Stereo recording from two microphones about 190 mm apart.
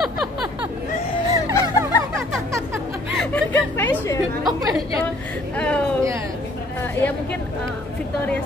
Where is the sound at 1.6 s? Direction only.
15° right (ahead or behind).